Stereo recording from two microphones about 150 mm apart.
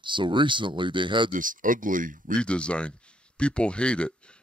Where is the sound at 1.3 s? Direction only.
65° right (ahead or behind).